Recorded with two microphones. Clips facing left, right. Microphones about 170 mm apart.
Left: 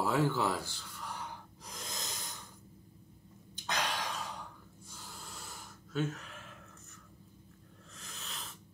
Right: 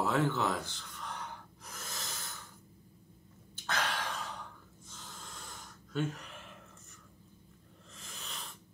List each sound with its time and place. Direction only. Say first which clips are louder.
0.0 s gasp: even; 5° left (ahead or behind)
3.5 s sigh: even; 15° left (ahead or behind)
4.8 s gasp: even; 10° left (ahead or behind)
7.9 s snake: even; centre (ahead or behind)